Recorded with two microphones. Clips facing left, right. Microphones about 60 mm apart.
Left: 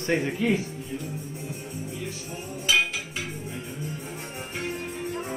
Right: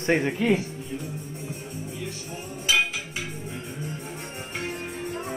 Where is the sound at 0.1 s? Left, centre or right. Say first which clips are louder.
Left 1 dB; right.